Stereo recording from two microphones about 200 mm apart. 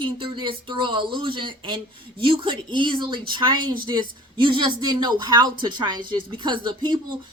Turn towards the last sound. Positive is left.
turn(degrees=-20)  # may be behind; listen again after turning